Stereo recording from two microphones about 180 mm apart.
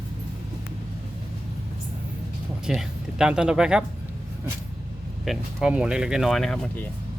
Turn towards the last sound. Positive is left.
turn(degrees=5)  # may be behind; listen again after turning